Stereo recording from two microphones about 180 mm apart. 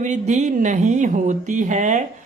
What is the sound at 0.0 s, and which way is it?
Speech, 40° right (ahead or behind).